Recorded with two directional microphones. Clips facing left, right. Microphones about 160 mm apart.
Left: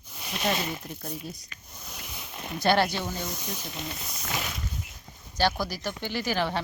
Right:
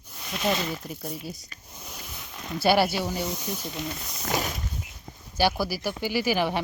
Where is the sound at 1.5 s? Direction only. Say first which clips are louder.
Right 1 dB; 35° right (ahead or behind).